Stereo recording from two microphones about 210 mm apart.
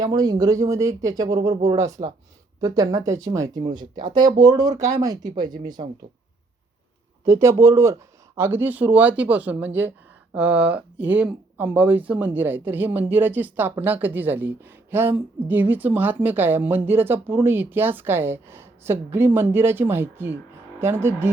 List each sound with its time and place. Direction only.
0.0 s speech: 20° right (ahead or behind)
7.3 s speech: 15° right (ahead or behind)